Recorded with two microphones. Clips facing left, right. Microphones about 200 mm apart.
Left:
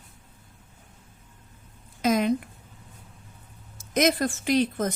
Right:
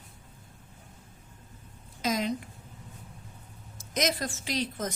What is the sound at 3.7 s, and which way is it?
Speech, 55° left (ahead or behind).